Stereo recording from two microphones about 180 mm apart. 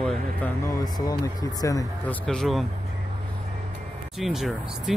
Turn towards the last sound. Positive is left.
turn(degrees=0)  # may be behind; listen again after turning